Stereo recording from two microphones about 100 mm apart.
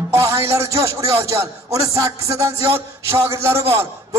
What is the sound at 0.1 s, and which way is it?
A man's voice, 25° right (ahead or behind).